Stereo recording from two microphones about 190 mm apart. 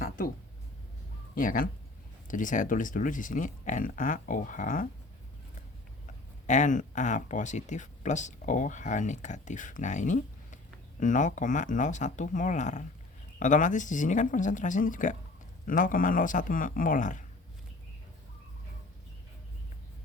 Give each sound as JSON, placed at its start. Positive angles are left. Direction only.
{"t": 1.4, "sound": "speech", "side_deg": 45}
{"t": 6.5, "sound": "speech", "side_deg": 40}